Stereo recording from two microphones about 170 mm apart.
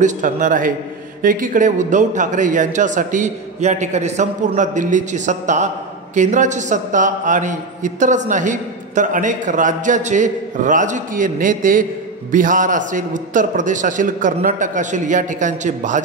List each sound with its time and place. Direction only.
0.0 s a man's voice: 50° right (ahead or behind)